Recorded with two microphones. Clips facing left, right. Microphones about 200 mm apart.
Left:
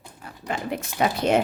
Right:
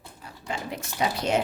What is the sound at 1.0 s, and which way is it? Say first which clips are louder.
Speech: left 4 dB; 55° left (ahead or behind).